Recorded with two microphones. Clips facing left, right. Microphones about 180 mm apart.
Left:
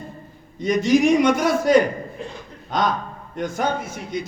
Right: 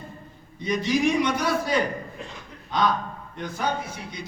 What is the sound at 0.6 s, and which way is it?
A man's voice, 45° left (ahead or behind).